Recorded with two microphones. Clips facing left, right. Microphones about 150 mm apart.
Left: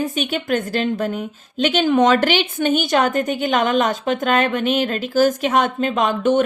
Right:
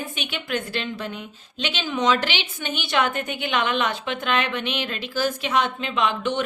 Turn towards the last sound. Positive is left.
turn(degrees=45)  # may be behind; listen again after turning